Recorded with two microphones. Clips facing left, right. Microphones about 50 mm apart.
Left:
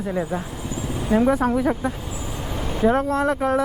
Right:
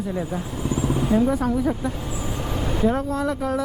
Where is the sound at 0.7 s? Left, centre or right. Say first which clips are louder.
Right 6 dB; right.